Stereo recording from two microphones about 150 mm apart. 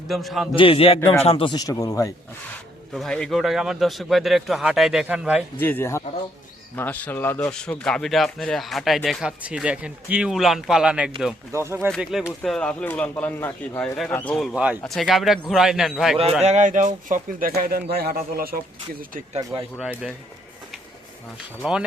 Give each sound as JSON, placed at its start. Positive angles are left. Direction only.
{"t": 0.1, "sound": "speech", "side_deg": 0}
{"t": 0.5, "sound": "a man's voice", "side_deg": 35}
{"t": 2.9, "sound": "speech", "side_deg": 5}
{"t": 5.5, "sound": "speech", "side_deg": 15}
{"t": 11.5, "sound": "speech", "side_deg": -15}
{"t": 12.4, "sound": "speech", "side_deg": 5}
{"t": 14.4, "sound": "speech", "side_deg": -10}
{"t": 16.4, "sound": "speech", "side_deg": -50}
{"t": 21.6, "sound": "speech", "side_deg": -5}